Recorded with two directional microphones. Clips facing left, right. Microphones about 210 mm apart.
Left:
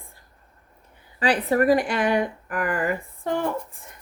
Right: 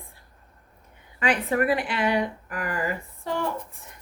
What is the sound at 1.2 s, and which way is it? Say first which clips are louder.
Speech: left 3 dB; 35° left (ahead or behind).